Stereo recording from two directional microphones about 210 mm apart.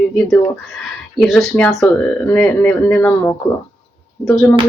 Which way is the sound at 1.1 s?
Centre (ahead or behind).